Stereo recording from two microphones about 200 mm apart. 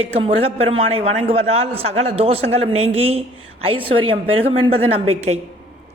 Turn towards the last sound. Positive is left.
turn(degrees=-30)  # may be behind; listen again after turning